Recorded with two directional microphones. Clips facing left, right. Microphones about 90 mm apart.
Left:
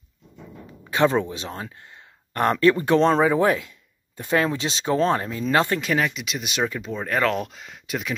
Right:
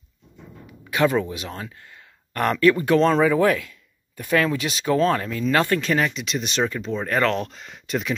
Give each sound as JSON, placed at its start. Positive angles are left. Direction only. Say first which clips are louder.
{"t": 0.8, "sound": "speech", "louder": "even", "side_deg": 30}
{"t": 5.9, "sound": "speech", "louder": "right 1 dB", "side_deg": 0}